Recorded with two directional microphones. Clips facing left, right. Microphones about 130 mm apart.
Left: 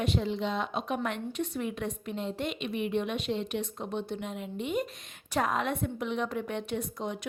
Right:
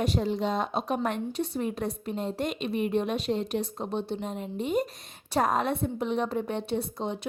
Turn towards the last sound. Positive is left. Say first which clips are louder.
# right 3 dB
turn(degrees=-30)  # may be behind; listen again after turning